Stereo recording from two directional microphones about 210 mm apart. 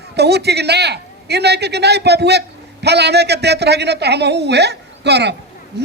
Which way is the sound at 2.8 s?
50° right (ahead or behind).